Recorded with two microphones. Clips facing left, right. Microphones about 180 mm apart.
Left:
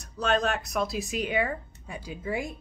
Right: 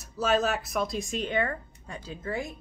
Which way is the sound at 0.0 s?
5° right (ahead or behind).